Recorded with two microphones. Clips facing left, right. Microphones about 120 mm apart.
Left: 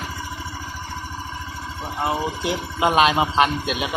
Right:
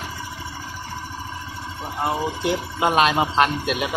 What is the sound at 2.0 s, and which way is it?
A man's voice, centre (ahead or behind).